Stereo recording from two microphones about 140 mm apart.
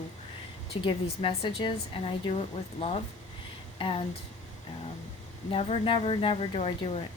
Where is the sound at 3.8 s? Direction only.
40° left (ahead or behind).